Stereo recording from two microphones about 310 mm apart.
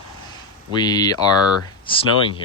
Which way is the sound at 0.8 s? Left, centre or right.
Centre.